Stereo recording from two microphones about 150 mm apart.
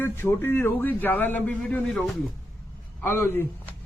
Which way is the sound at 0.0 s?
15° left (ahead or behind).